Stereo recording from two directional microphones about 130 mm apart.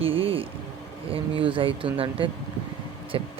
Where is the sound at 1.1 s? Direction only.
45° right (ahead or behind).